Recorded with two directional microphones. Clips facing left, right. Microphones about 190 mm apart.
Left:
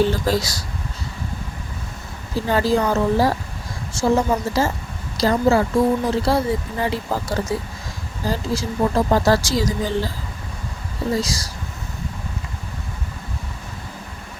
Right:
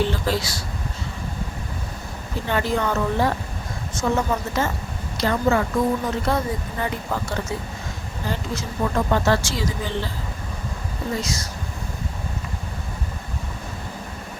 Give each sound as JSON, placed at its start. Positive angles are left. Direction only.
{"t": 0.0, "sound": "speech", "side_deg": 40}
{"t": 2.3, "sound": "speech", "side_deg": 35}
{"t": 11.1, "sound": "speech", "side_deg": 35}